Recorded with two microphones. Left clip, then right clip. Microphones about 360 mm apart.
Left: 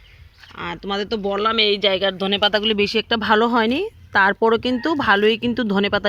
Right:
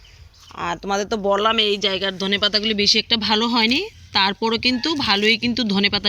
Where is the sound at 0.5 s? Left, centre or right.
Centre.